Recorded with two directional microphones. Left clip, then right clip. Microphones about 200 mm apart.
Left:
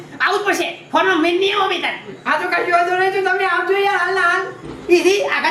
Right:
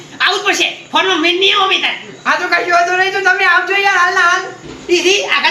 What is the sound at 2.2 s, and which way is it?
A woman's voice, 20° right (ahead or behind).